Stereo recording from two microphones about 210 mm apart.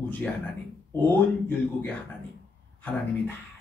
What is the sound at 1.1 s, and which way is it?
Speech, 5° left (ahead or behind).